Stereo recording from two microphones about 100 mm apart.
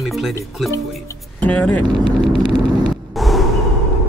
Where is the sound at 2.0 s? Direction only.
55° right (ahead or behind).